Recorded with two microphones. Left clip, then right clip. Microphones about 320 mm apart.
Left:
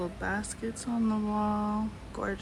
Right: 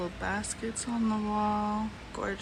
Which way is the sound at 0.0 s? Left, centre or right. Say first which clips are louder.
Even; centre.